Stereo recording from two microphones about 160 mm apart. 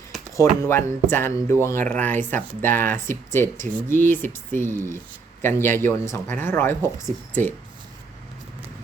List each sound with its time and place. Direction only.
0.3 s speech: 15° left (ahead or behind)